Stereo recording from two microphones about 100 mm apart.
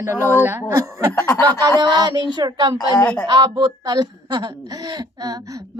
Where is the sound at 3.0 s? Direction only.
15° left (ahead or behind).